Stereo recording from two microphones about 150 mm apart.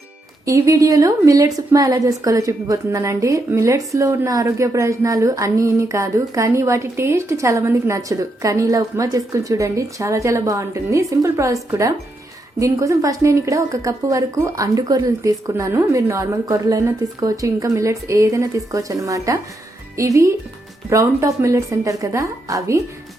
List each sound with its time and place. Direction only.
0.4 s a woman's voice: 20° right (ahead or behind)